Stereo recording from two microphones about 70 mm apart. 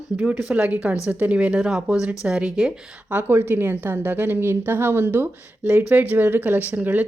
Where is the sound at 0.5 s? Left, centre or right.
Right.